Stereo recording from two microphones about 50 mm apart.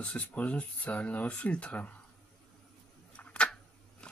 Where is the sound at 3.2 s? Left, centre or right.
Left.